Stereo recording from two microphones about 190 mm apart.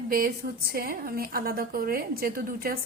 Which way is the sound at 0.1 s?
50° right (ahead or behind).